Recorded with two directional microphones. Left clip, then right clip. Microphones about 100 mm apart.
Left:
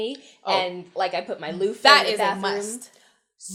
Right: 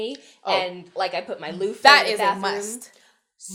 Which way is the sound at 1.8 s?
50° right (ahead or behind).